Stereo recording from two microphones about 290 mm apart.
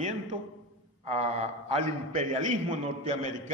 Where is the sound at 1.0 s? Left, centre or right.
Right.